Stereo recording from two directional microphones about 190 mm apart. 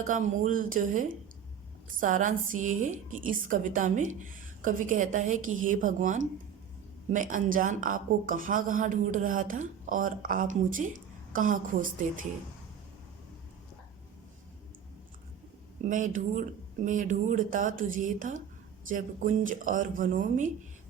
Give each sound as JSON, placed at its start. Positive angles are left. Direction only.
{"t": 0.1, "sound": "a woman's voice", "side_deg": -40}
{"t": 15.9, "sound": "a woman's voice", "side_deg": -45}